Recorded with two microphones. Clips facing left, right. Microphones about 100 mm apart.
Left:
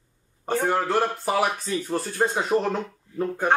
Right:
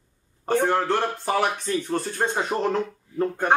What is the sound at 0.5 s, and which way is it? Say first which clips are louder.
Speech: right 1 dB; centre (ahead or behind).